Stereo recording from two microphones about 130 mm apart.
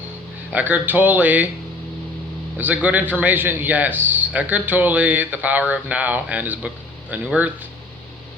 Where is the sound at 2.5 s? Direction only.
10° right (ahead or behind).